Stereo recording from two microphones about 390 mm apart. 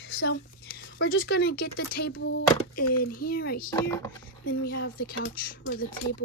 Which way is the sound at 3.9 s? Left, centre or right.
Centre.